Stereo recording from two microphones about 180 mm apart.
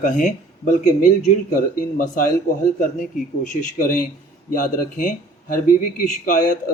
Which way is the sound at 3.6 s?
45° left (ahead or behind).